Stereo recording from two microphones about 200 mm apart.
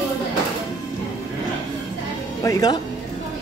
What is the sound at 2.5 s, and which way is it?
Speech, 20° left (ahead or behind).